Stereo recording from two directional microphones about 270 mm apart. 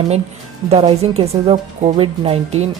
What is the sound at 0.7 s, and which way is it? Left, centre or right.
A woman's voice, right.